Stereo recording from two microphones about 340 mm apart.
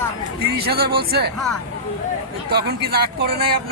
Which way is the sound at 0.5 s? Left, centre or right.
Right.